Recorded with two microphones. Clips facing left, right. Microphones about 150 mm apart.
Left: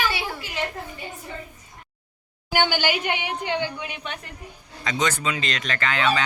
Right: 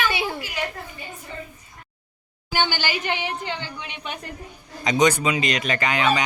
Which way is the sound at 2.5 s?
10° left (ahead or behind).